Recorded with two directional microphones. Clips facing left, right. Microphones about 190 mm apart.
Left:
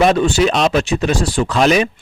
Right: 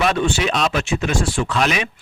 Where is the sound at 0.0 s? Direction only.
40° left (ahead or behind).